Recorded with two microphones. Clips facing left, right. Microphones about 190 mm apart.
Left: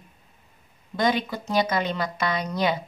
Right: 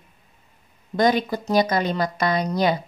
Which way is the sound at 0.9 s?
40° right (ahead or behind).